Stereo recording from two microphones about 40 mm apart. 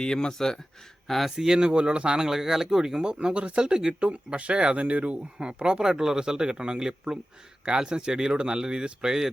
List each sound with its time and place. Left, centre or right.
0.0 s speech: centre
1.0 s speech: centre
1.4 s speech: centre; by 5.1 s right
5.4 s speech: right